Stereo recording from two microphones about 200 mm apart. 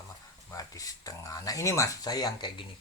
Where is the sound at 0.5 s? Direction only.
15° left (ahead or behind).